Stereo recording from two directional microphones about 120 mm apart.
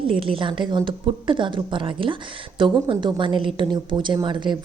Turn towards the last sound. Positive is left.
turn(degrees=-40)  # may be behind; listen again after turning